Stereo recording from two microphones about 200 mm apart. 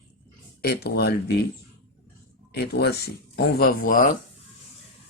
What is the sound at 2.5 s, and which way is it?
Speech, 55° left (ahead or behind).